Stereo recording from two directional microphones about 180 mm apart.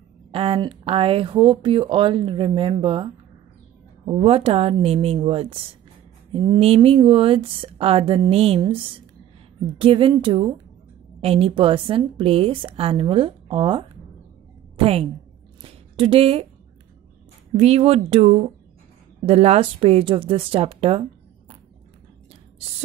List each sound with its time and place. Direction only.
0.3 s a woman's voice: 30° right (ahead or behind)
15.6 s a sound: 30° right (ahead or behind)
17.5 s a woman's voice: 35° right (ahead or behind)